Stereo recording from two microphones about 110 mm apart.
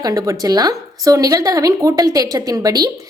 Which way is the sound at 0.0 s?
30° right (ahead or behind).